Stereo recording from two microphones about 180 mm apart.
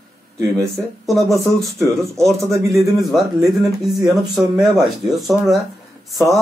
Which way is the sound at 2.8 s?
Centre (ahead or behind).